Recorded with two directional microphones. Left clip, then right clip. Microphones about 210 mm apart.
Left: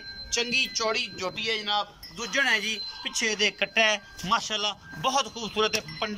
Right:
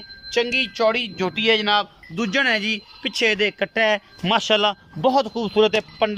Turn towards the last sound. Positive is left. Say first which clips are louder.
# right 9 dB
turn(degrees=-40)  # may be behind; listen again after turning